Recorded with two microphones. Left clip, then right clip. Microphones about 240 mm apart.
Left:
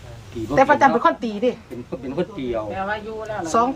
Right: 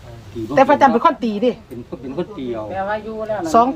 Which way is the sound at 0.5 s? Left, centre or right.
Right.